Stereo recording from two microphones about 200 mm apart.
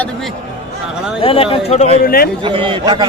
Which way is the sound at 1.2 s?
25° left (ahead or behind).